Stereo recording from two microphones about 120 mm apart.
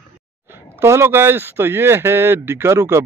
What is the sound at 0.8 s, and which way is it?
Speech, 20° right (ahead or behind).